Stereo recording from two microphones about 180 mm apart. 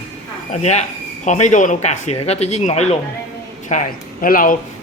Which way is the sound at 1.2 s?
40° left (ahead or behind).